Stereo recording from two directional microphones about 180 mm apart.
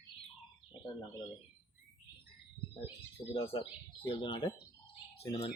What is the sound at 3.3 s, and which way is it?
Speech, 30° left (ahead or behind).